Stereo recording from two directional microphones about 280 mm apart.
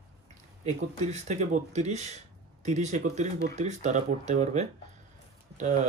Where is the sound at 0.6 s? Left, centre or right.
Right.